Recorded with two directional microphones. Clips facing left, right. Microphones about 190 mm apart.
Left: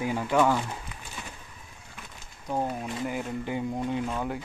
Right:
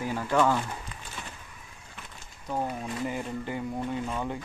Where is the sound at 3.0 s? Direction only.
5° left (ahead or behind).